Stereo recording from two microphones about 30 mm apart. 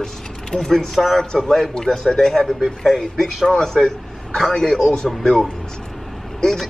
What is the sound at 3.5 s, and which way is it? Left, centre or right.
A man's voice, left.